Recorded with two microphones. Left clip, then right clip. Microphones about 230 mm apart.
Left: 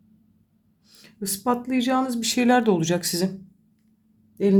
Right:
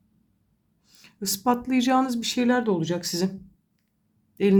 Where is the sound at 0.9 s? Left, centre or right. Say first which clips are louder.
Right 2 dB; centre.